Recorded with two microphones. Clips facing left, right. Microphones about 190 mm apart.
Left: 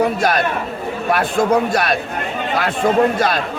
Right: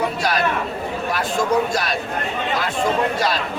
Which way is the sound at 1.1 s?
55° left (ahead or behind).